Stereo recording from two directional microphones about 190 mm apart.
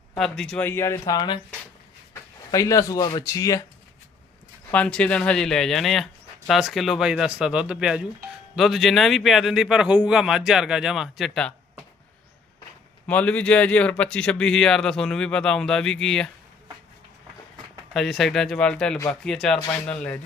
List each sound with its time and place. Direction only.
0.2 s speech: 5° left (ahead or behind); by 1.4 s 20° left (ahead or behind)
2.5 s speech: 15° left (ahead or behind)
4.7 s speech: 5° left (ahead or behind)
13.1 s speech: 5° left (ahead or behind)
17.9 s speech: centre (ahead or behind)